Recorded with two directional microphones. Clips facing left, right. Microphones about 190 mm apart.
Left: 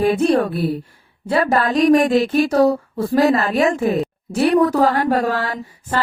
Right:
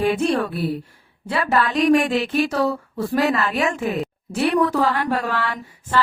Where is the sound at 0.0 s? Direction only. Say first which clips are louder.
Left 4 dB; 40° left (ahead or behind).